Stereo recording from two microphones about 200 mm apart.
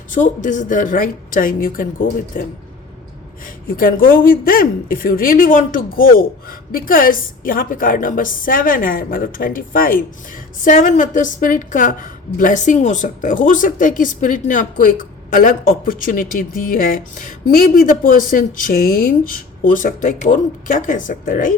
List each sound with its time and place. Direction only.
0.1 s a woman's voice: 40° left (ahead or behind)